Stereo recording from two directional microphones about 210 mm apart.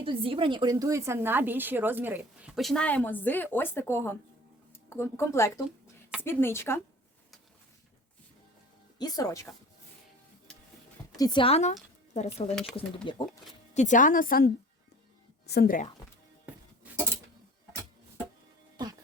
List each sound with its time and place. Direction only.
0.0 s speech: 25° right (ahead or behind); by 6.7 s 10° left (ahead or behind)
9.0 s speech: 20° left (ahead or behind)
11.2 s a woman's voice: 20° left (ahead or behind)
13.7 s a woman's voice: 35° left (ahead or behind)
18.8 s music: 20° right (ahead or behind)